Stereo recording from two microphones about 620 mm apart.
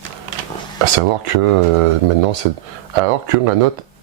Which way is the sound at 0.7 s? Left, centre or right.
Right.